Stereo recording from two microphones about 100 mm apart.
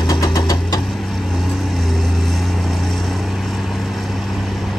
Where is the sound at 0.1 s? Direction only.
40° left (ahead or behind).